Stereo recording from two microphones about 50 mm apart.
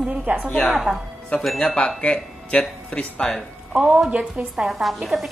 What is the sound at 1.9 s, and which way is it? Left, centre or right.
Speech, centre.